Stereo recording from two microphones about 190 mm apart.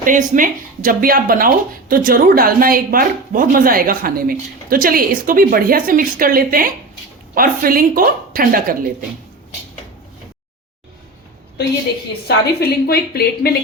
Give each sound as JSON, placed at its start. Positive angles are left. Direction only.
{"t": 0.0, "sound": "speech", "side_deg": -45}
{"t": 12.5, "sound": "speech", "side_deg": 55}